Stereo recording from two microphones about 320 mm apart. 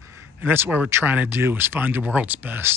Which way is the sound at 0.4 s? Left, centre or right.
Centre.